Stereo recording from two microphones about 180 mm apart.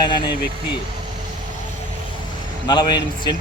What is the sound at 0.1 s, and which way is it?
Speech, 25° left (ahead or behind).